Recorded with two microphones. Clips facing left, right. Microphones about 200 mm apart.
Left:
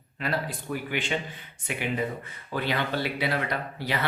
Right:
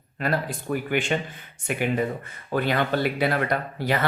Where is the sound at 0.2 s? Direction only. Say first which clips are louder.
Right 4 dB; 50° right (ahead or behind).